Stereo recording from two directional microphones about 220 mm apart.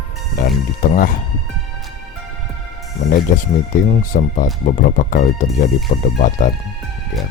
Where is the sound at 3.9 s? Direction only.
35° left (ahead or behind).